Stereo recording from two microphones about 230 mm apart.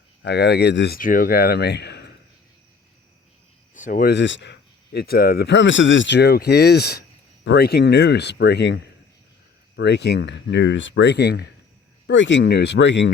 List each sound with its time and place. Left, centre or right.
0.2 s speech: left
3.8 s speech: left
4.1 s speech: left